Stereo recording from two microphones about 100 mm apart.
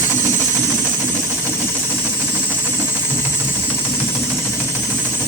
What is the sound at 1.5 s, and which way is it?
Engine, 25° left (ahead or behind).